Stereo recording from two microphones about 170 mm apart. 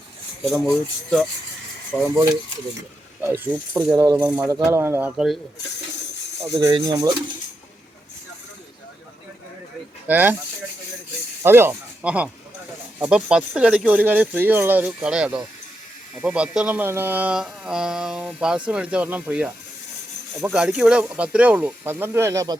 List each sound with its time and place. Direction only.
0.4 s speech: centre (ahead or behind)
1.9 s speech: 10° left (ahead or behind)
3.2 s speech: 10° right (ahead or behind)
3.9 s speech: 20° right (ahead or behind)
4.2 s speech: 10° right (ahead or behind)
6.6 s speech: 25° right (ahead or behind)
10.1 s speech: 10° right (ahead or behind)
11.4 s speech: 15° right (ahead or behind)